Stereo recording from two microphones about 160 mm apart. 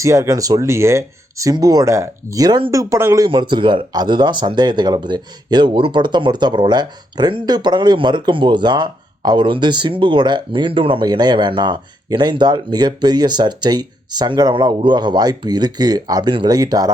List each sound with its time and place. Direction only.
0.0 s speech: 20° right (ahead or behind)
3.2 s speech: 30° right (ahead or behind)